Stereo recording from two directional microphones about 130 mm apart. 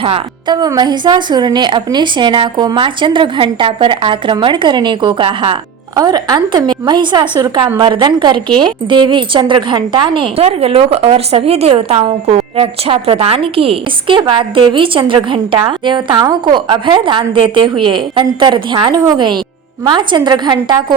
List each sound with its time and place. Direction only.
0.0 s a woman's voice: 40° right (ahead or behind)
6.0 s a woman's voice: 30° right (ahead or behind)